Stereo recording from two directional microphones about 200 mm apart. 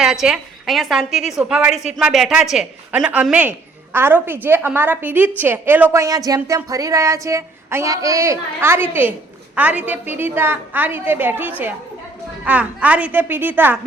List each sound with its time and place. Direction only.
0.0 s a woman's voice: centre (ahead or behind)